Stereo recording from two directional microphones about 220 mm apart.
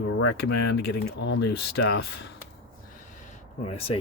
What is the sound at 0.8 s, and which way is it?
Speech, 50° left (ahead or behind).